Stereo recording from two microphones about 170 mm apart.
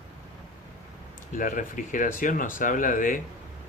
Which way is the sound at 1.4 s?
50° left (ahead or behind).